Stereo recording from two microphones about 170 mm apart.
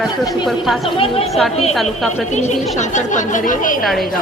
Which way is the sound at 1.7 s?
Centre (ahead or behind).